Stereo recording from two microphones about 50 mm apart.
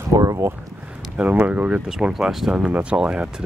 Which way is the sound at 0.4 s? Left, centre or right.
Right.